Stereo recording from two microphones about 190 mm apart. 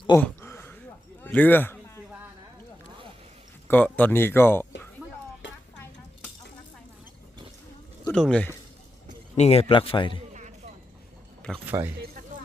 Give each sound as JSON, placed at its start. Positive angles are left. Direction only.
{"t": 0.1, "sound": "a sound", "side_deg": 15}
{"t": 1.2, "sound": "speech", "side_deg": 10}
{"t": 3.7, "sound": "speech", "side_deg": 10}
{"t": 8.0, "sound": "speech", "side_deg": 5}
{"t": 9.3, "sound": "a man's voice", "side_deg": 35}
{"t": 11.6, "sound": "a man's voice", "side_deg": -10}